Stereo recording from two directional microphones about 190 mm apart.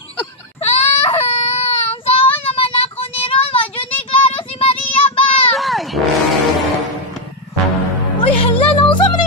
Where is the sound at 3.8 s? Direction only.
30° left (ahead or behind).